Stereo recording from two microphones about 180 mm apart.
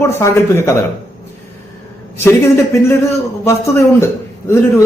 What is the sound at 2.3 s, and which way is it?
A man's voice, 15° left (ahead or behind).